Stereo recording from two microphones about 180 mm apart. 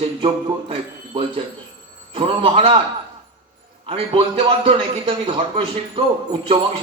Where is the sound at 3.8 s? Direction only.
30° right (ahead or behind).